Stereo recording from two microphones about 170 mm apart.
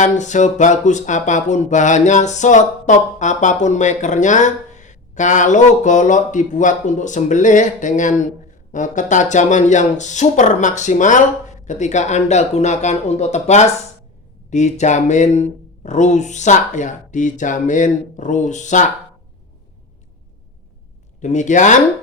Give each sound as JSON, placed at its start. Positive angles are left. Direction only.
{"t": 0.0, "sound": "speech", "side_deg": 45}
{"t": 21.2, "sound": "speech", "side_deg": 45}